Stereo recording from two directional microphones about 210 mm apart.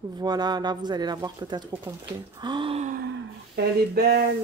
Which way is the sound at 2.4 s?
20° right (ahead or behind).